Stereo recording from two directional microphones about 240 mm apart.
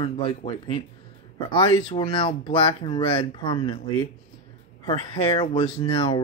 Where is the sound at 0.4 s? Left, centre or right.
Left.